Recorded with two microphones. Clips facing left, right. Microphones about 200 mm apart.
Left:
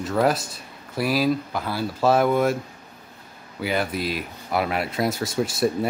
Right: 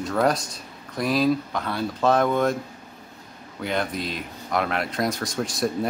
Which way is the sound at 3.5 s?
5° left (ahead or behind).